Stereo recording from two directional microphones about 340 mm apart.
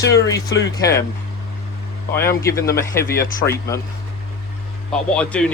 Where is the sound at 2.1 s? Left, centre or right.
Centre.